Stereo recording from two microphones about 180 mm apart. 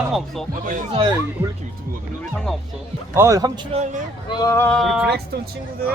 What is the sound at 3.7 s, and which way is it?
Speech, 45° right (ahead or behind).